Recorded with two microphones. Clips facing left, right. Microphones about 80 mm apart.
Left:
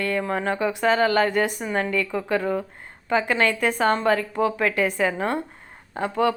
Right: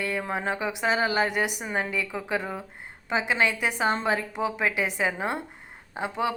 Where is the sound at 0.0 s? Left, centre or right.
Centre.